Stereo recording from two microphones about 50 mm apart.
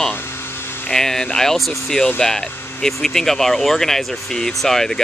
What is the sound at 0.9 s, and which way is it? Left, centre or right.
Speech, centre.